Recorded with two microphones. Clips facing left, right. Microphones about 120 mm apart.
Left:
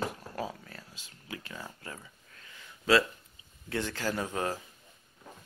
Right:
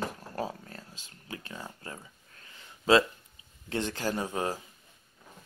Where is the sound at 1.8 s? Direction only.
30° right (ahead or behind).